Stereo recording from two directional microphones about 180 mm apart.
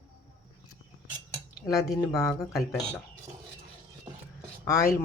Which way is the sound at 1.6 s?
15° left (ahead or behind).